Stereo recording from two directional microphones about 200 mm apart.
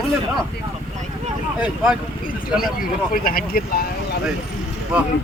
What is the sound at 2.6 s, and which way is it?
Speech, 45° left (ahead or behind).